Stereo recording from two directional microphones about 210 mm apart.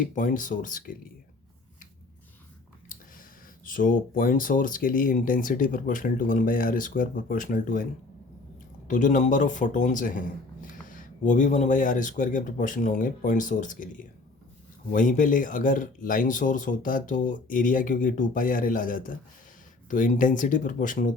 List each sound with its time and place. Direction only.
0.0 s speech: 40° left (ahead or behind)
2.9 s speech: 40° left (ahead or behind)
8.9 s speech: 35° left (ahead or behind)